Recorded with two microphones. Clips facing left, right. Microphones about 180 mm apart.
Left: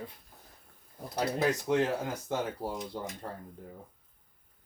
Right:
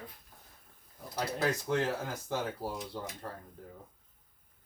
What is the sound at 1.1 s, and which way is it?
Speech, 20° left (ahead or behind).